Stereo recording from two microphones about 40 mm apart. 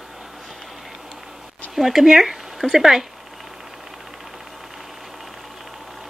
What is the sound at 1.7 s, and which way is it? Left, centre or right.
Speech, centre.